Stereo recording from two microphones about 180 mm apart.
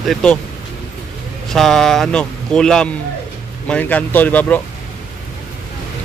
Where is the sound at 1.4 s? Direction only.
Centre (ahead or behind).